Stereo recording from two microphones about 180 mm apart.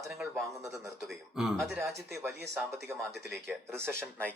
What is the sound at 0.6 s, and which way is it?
Speech, 15° right (ahead or behind).